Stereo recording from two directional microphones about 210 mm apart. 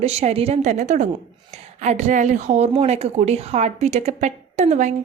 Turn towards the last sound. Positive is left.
turn(degrees=-35)  # may be behind; listen again after turning